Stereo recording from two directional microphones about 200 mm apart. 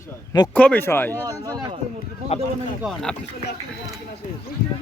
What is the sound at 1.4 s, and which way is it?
Speech, 15° right (ahead or behind).